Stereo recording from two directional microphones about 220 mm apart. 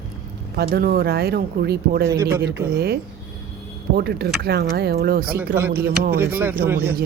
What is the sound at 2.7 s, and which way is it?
Speech, 45° right (ahead or behind).